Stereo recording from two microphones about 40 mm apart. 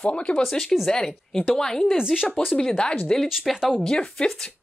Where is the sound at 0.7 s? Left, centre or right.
Centre.